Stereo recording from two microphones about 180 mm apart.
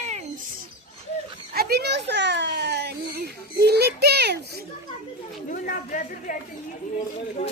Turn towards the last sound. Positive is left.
turn(degrees=45)  # may be behind; listen again after turning